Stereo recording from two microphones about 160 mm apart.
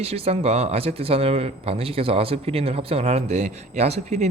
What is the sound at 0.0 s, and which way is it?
Speech, 40° right (ahead or behind).